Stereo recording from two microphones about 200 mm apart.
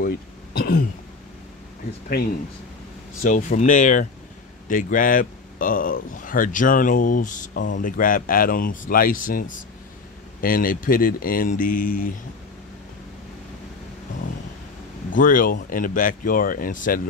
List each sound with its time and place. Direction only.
0.0 s throat clearing: 50° left (ahead or behind)
3.2 s speech: 40° left (ahead or behind)
15.0 s speech: 40° left (ahead or behind)